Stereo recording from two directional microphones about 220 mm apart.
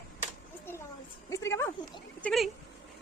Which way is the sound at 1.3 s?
15° left (ahead or behind).